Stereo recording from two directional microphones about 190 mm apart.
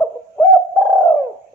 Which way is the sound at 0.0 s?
5° left (ahead or behind).